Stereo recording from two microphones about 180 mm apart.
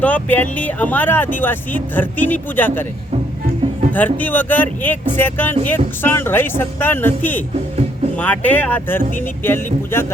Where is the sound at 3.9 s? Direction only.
10° left (ahead or behind).